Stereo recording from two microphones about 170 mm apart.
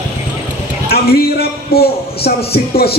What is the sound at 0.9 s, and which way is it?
A man's voice, 65° left (ahead or behind).